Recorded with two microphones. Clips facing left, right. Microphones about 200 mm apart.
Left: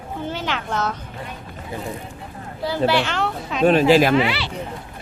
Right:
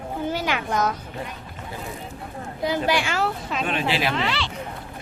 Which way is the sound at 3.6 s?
40° left (ahead or behind).